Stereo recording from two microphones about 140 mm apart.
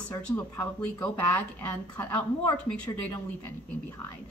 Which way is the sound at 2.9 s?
25° left (ahead or behind).